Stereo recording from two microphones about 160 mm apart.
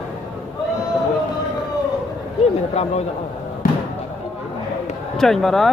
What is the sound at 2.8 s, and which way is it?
Speech, 45° left (ahead or behind).